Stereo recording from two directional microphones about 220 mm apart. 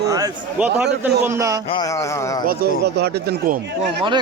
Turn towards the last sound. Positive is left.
turn(degrees=-45)  # may be behind; listen again after turning